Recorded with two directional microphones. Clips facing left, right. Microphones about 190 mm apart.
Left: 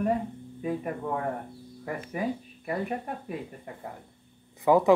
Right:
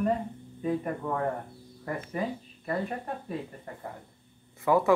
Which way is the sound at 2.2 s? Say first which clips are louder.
Left 2 dB; 10° left (ahead or behind).